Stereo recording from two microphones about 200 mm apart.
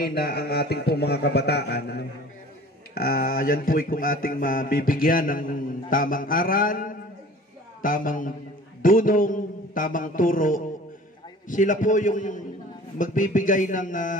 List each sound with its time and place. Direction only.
0.0 s speech: 50° left (ahead or behind)
2.9 s a sound: 50° left (ahead or behind)
11.4 s a man's voice: 40° left (ahead or behind)